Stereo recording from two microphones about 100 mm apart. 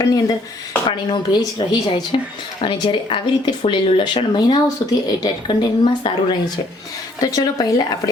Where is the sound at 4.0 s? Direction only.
50° left (ahead or behind).